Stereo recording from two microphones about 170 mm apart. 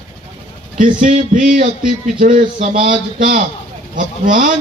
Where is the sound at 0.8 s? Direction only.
50° right (ahead or behind).